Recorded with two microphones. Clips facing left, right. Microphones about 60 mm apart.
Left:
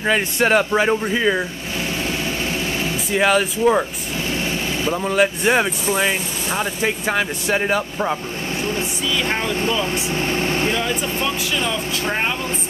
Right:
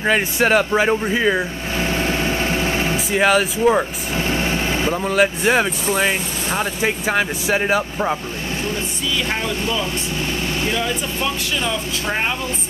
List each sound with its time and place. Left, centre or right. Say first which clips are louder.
0.0 s a man's voice: right 1 dB; centre
1.8 s vehicle: right 4 dB; right
3.1 s speech: even; centre
4.2 s light engine: right 3 dB; right
4.9 s speech: left 1 dB; centre
9.2 s speech: left 2 dB; left
10.1 s speech: left 4 dB; left